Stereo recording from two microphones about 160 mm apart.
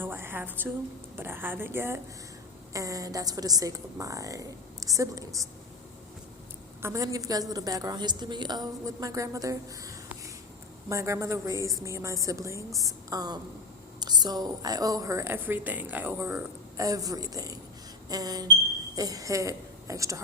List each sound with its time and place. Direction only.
0.0 s a sound: 15° right (ahead or behind)
1.1 s a woman's voice: 15° right (ahead or behind)
6.8 s a woman's voice: 20° right (ahead or behind)